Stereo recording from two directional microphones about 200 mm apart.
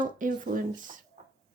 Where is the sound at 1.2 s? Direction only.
35° right (ahead or behind).